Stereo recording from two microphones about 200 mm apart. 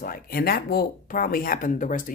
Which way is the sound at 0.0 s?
45° left (ahead or behind).